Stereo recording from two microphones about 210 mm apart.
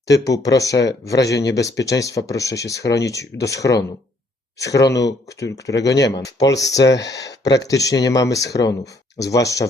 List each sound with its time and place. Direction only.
0.4 s speech: 15° left (ahead or behind)
6.9 s speech: 55° left (ahead or behind)
7.7 s speech: 15° left (ahead or behind)